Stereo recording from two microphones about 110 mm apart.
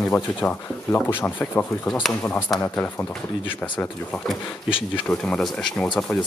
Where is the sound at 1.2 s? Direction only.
15° left (ahead or behind).